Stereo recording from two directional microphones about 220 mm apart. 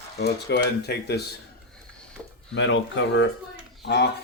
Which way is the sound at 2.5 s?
55° left (ahead or behind).